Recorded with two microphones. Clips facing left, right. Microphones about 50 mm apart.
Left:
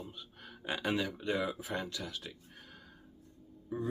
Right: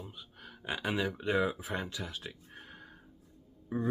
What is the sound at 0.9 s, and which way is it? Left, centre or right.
Speech, centre.